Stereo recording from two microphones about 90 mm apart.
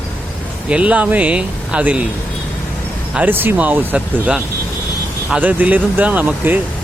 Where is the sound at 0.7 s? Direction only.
15° right (ahead or behind).